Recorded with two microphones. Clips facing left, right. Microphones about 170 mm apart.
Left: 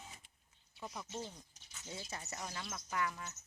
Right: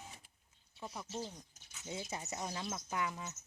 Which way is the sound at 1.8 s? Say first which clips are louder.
Right 4 dB; 20° right (ahead or behind).